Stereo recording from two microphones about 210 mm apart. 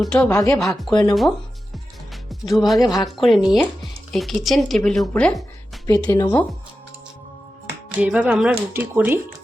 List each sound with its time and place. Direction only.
0.0 s speech: 5° left (ahead or behind)
0.3 s speech: 15° left (ahead or behind)
0.5 s speech: centre (ahead or behind)
2.3 s speech: centre (ahead or behind)
2.8 s speech: 15° left (ahead or behind)
3.1 s speech: centre (ahead or behind)
5.8 s speech: 15° left (ahead or behind)
7.9 s speech: 5° right (ahead or behind)